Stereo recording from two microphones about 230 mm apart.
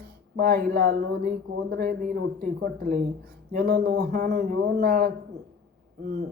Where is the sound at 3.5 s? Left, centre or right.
Right.